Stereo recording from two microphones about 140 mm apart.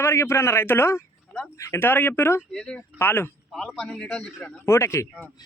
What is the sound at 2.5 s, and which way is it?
Speech, 5° left (ahead or behind).